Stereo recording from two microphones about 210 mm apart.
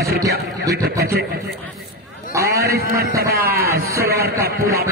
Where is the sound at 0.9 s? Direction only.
45° right (ahead or behind).